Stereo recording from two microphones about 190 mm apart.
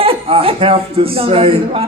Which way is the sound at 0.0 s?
30° right (ahead or behind).